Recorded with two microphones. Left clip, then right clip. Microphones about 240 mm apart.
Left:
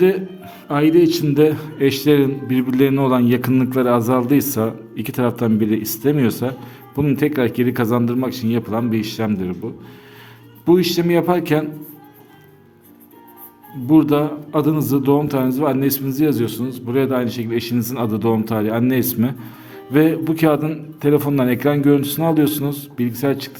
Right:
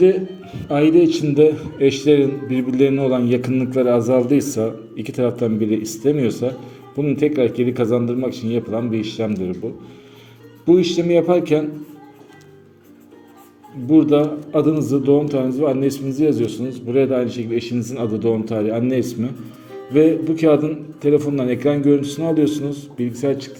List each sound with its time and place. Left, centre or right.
0.0 s a man's voice: left
10.7 s a man's voice: left
13.9 s a man's voice: left